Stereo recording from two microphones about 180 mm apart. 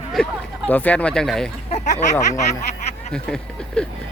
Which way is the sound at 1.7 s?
40° left (ahead or behind).